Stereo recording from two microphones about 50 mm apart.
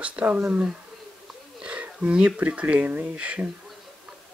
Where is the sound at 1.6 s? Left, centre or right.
Right.